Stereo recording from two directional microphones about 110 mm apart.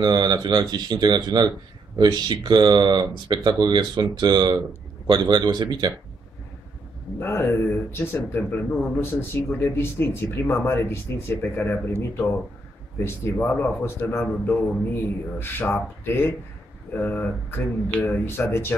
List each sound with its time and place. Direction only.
0.0 s speech: 40° right (ahead or behind)
7.2 s speech: 20° left (ahead or behind)